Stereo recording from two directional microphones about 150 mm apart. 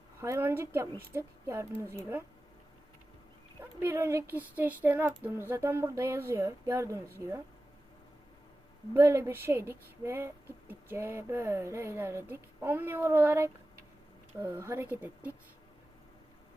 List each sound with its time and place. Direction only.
0.2 s speech: 15° right (ahead or behind)
3.6 s speech: 15° right (ahead or behind)
8.9 s speech: 20° right (ahead or behind)